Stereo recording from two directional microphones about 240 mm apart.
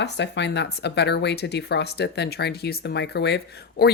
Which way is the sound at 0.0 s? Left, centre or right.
Left.